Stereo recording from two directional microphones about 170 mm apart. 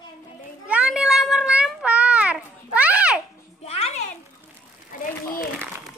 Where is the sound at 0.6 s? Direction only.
5° right (ahead or behind).